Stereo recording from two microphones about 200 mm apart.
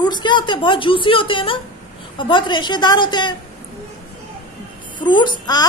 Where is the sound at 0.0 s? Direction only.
20° left (ahead or behind).